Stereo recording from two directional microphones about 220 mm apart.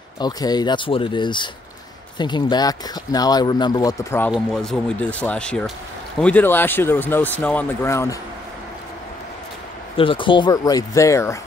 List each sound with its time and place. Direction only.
0.2 s speech: 20° left (ahead or behind)
9.9 s speech: 25° left (ahead or behind)